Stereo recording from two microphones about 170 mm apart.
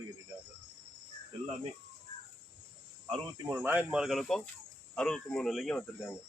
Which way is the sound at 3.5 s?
10° right (ahead or behind).